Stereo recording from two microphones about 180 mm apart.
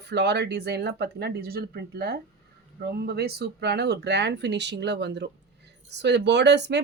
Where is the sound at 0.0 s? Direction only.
65° right (ahead or behind).